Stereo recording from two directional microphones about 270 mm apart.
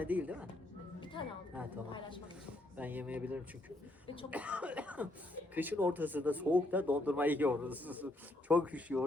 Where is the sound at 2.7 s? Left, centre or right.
Centre.